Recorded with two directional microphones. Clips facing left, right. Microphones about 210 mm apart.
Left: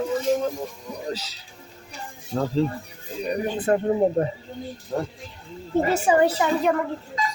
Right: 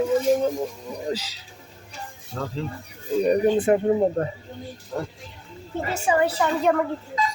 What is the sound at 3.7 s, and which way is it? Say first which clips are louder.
Speech: left 2 dB; 15° right (ahead or behind).